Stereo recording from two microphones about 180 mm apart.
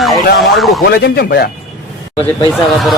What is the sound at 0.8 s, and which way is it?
Speech, 65° left (ahead or behind).